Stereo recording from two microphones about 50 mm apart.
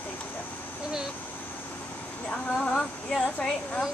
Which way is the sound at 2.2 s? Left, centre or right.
Left.